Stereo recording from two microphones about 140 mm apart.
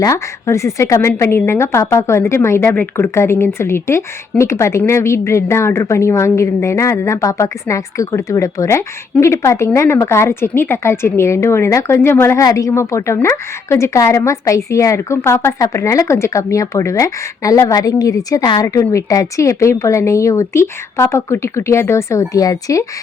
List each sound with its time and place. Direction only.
0.0 s speech: 20° left (ahead or behind)